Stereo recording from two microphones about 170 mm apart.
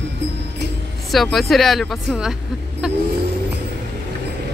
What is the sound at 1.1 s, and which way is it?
Speech, centre (ahead or behind).